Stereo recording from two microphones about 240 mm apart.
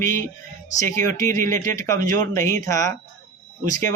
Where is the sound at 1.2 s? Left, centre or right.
Centre.